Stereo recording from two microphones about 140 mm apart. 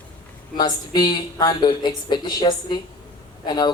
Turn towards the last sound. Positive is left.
turn(degrees=30)  # may be behind; listen again after turning